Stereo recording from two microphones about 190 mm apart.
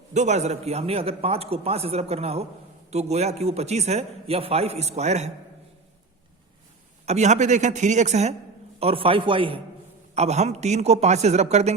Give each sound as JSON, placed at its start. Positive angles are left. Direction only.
{"t": 0.1, "sound": "a man's voice", "side_deg": -35}
{"t": 7.0, "sound": "a man's voice", "side_deg": -35}